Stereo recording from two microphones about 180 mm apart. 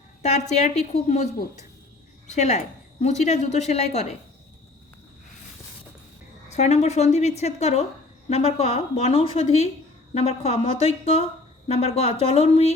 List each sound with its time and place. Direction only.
0.2 s a woman's voice: 40° left (ahead or behind)
6.5 s a woman's voice: 40° left (ahead or behind)